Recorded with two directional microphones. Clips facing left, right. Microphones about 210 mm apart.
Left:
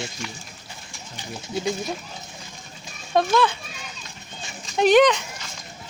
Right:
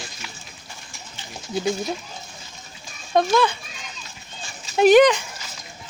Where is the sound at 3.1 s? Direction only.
Centre (ahead or behind).